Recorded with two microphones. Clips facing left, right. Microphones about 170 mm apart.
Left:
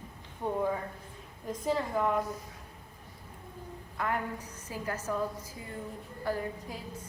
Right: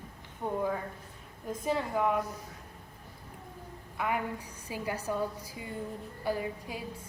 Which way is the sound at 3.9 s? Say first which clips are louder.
Right 1 dB; 5° right (ahead or behind).